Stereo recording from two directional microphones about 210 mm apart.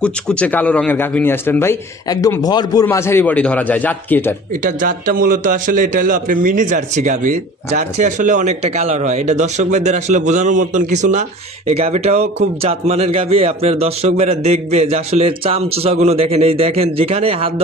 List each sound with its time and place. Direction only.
0.0 s a man's voice: 5° left (ahead or behind)
4.6 s a man's voice: 40° right (ahead or behind)